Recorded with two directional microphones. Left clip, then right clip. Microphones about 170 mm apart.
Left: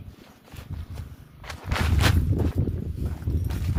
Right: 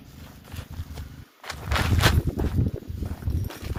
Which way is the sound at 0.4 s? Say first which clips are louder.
Right 2 dB; 70° right (ahead or behind).